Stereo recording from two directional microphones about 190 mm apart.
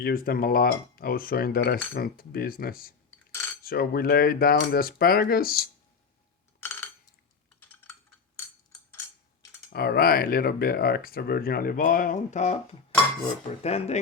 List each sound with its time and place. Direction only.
0.0 s speech: 50° left (ahead or behind)
6.6 s a sound: 10° left (ahead or behind)
9.6 s speech: 55° left (ahead or behind); by 12.5 s 40° left (ahead or behind)
13.6 s speech: 35° left (ahead or behind)